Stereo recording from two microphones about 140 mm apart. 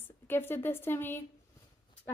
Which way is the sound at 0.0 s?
15° left (ahead or behind).